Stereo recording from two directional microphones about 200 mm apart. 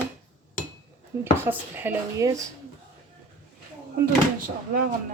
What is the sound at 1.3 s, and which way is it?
Speech, 10° right (ahead or behind).